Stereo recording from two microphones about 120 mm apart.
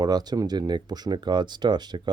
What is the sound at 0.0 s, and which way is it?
Speech, 35° right (ahead or behind).